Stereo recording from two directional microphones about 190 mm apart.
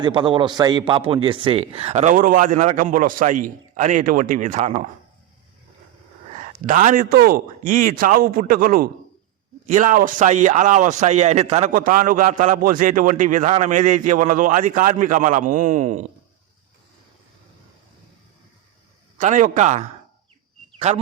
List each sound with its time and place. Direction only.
0.0 s a man's voice: 25° right (ahead or behind); by 4.9 s 40° right (ahead or behind)
6.3 s a man's voice: 40° right (ahead or behind)
19.2 s a man's voice: 40° right (ahead or behind)